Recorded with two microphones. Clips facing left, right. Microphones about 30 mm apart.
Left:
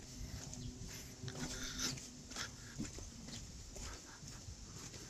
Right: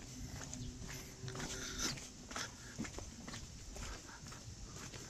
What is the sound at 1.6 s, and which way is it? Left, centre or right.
Gears, centre.